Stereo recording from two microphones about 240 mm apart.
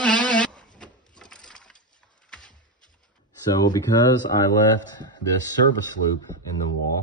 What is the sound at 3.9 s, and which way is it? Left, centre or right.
Speech, left.